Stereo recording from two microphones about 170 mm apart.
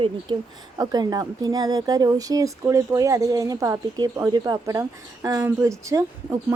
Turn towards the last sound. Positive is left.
turn(degrees=-15)  # may be behind; listen again after turning